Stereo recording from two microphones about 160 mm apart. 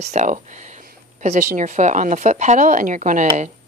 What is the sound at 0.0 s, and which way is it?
Speech, 50° right (ahead or behind).